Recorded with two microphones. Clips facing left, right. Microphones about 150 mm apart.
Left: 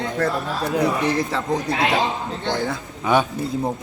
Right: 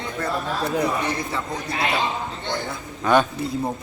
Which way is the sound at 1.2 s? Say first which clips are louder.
Left 6 dB; 90° left.